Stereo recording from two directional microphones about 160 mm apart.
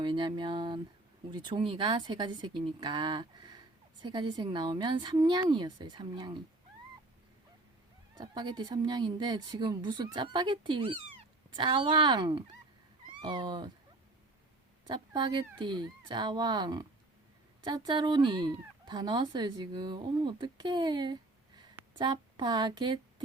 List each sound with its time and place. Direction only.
0.0 s speech: 30° right (ahead or behind)
8.1 s speech: 25° right (ahead or behind)
14.8 s speech: 30° right (ahead or behind)